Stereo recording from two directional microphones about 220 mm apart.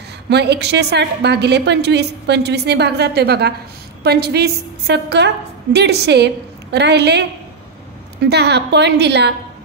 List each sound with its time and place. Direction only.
0.3 s a woman's voice: 50° right (ahead or behind)